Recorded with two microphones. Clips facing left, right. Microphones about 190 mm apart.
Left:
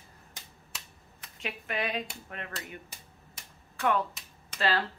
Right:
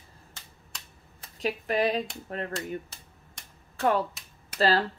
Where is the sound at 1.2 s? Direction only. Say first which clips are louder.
Right 9 dB; 35° right (ahead or behind).